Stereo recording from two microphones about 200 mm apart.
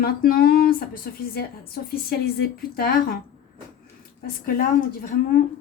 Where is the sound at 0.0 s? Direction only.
50° left (ahead or behind).